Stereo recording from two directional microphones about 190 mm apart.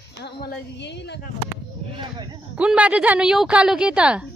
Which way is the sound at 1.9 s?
25° right (ahead or behind).